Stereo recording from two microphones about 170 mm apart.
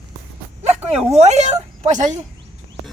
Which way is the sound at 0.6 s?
40° right (ahead or behind).